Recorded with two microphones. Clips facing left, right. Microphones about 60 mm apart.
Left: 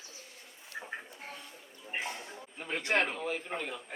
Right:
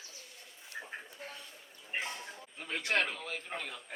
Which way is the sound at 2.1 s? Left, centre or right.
Left.